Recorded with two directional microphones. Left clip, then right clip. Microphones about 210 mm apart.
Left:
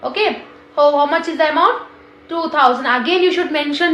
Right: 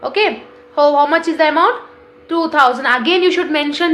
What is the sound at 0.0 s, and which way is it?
A woman's voice, 45° right (ahead or behind).